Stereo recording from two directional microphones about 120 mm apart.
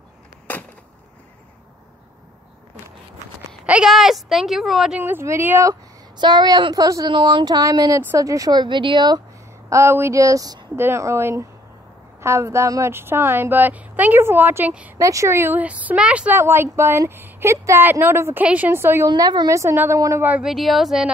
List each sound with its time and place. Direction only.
0.5 s a sound: 15° left (ahead or behind)
3.6 s speech: 10° right (ahead or behind)
5.0 s a woman's voice: 20° right (ahead or behind)
6.1 s a woman's voice: 35° right (ahead or behind)
7.1 s a woman's voice: 40° right (ahead or behind)
9.7 s a woman's voice: 25° right (ahead or behind)
15.0 s speech: 25° right (ahead or behind); by 16.3 s 10° right (ahead or behind)
16.3 s a woman's voice: 20° right (ahead or behind)
19.0 s a woman's voice: 35° right (ahead or behind)
20.2 s speech: 10° right (ahead or behind)